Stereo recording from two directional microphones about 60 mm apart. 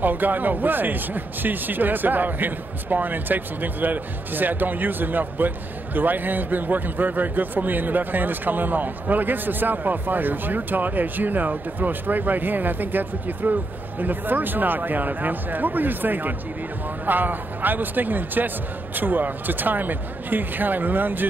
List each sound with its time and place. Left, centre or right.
0.0 s a man's voice: right